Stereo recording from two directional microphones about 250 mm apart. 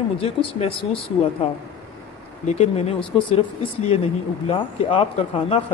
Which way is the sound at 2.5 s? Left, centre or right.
Left.